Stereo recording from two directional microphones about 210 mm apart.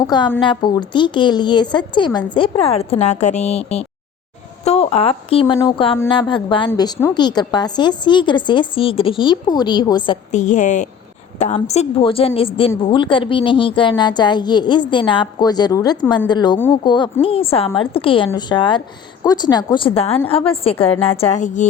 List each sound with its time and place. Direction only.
0.3 s a woman's voice: 25° left (ahead or behind)
10.3 s a woman's voice: 35° left (ahead or behind)